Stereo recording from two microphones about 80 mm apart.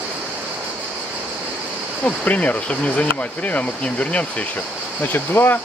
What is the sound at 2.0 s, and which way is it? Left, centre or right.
Speech, centre.